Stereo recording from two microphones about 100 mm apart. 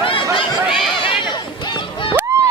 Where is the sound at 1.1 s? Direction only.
50° left (ahead or behind).